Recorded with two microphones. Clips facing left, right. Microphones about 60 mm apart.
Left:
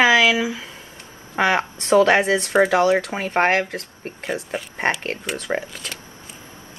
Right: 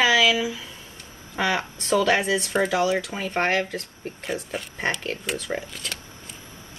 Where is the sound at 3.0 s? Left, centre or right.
Left.